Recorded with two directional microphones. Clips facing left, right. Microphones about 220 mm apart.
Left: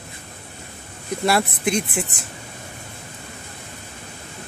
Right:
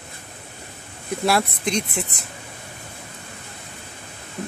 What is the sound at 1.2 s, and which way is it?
Speech, 5° left (ahead or behind).